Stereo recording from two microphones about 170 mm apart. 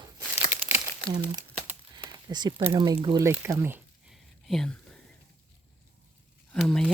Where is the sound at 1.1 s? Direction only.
25° right (ahead or behind).